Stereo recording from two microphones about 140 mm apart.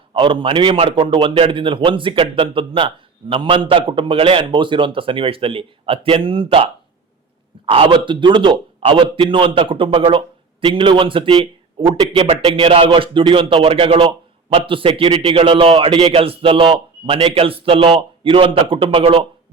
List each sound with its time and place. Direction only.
0.1 s a man's voice: 35° right (ahead or behind)
7.7 s a man's voice: 35° right (ahead or behind)
12.1 s speech: 50° right (ahead or behind)
12.5 s a man's voice: 40° right (ahead or behind)